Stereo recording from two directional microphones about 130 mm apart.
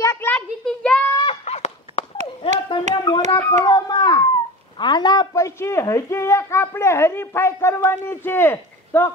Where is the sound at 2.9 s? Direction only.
30° left (ahead or behind).